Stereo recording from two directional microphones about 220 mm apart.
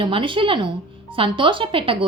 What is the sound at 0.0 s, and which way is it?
A woman's voice, 25° right (ahead or behind).